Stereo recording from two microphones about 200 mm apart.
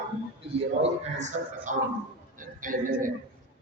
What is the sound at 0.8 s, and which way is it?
A man's voice, 35° right (ahead or behind).